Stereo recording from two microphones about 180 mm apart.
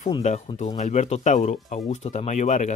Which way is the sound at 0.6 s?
40° left (ahead or behind).